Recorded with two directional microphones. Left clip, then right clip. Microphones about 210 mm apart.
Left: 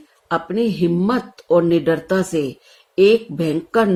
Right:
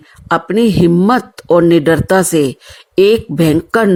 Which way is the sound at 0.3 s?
45° right (ahead or behind).